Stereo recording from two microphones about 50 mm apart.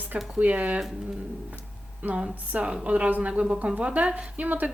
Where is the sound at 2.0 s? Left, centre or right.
Right.